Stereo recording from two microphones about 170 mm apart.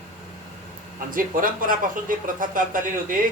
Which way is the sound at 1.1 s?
55° right (ahead or behind).